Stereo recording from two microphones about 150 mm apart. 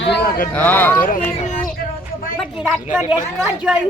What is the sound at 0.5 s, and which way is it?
Speech, 10° left (ahead or behind).